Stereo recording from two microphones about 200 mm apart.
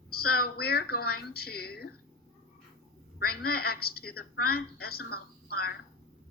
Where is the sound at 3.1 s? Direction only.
50° left (ahead or behind).